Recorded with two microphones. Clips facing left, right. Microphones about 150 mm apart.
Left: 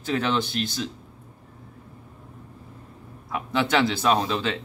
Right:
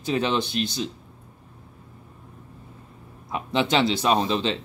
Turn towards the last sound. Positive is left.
turn(degrees=-25)  # may be behind; listen again after turning